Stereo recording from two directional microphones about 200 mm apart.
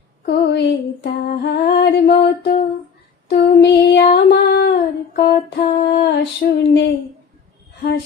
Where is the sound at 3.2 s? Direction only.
55° left (ahead or behind).